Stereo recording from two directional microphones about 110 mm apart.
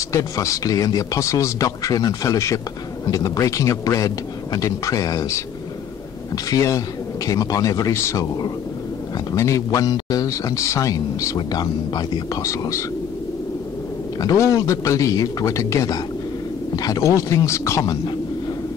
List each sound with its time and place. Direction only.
0.1 s speech: 30° left (ahead or behind)
9.3 s speech: 30° left (ahead or behind)
11.3 s speech: 40° left (ahead or behind)
14.2 s speech: 30° left (ahead or behind)